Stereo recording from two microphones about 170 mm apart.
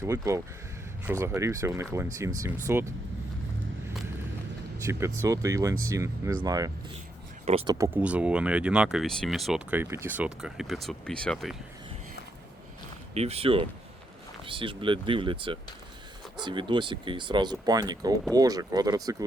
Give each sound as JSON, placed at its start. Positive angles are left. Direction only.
{"t": 0.0, "sound": "speech", "side_deg": -15}
{"t": 4.9, "sound": "speech", "side_deg": -15}
{"t": 7.4, "sound": "speech", "side_deg": -35}
{"t": 7.8, "sound": "speech", "side_deg": -10}
{"t": 13.1, "sound": "speech", "side_deg": -40}